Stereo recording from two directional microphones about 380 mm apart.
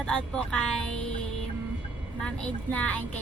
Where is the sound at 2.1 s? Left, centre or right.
Centre.